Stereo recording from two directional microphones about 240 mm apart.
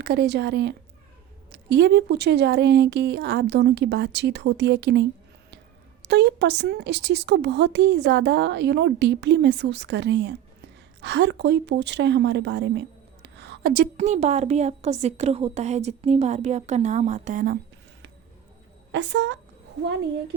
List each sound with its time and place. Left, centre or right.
0.0 s a woman's voice: right
18.9 s speech: right